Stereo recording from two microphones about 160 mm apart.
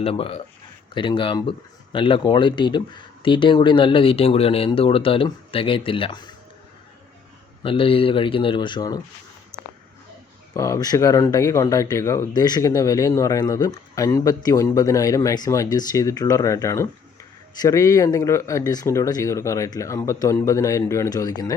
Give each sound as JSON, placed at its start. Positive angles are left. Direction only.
{"t": 0.0, "sound": "speech", "side_deg": 35}
{"t": 7.6, "sound": "speech", "side_deg": 35}
{"t": 10.5, "sound": "speech", "side_deg": 20}